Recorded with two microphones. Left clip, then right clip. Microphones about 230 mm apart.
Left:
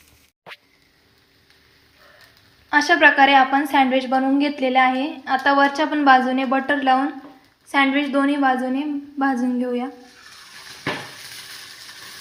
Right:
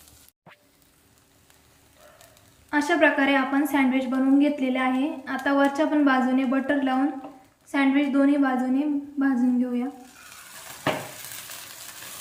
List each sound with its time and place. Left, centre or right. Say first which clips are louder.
2.9 s a woman's voice: left 7 dB; left